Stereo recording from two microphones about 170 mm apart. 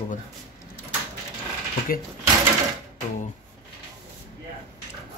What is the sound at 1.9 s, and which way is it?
Speech, 55° left (ahead or behind).